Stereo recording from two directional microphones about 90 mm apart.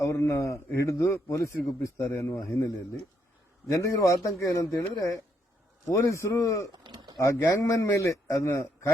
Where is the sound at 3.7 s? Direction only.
35° left (ahead or behind).